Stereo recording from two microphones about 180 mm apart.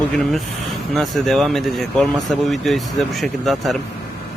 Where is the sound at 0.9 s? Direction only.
Centre (ahead or behind).